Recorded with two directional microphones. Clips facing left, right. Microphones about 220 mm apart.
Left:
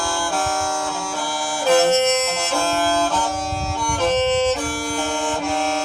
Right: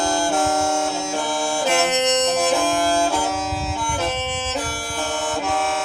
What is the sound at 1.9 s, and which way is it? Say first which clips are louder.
Music: left 1 dB; 15° right (ahead or behind).